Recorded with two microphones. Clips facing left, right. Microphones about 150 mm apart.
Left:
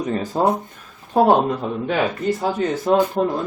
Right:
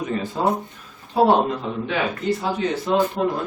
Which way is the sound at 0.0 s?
40° left (ahead or behind).